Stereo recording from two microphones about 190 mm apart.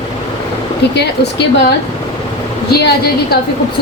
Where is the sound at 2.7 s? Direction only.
55° left (ahead or behind).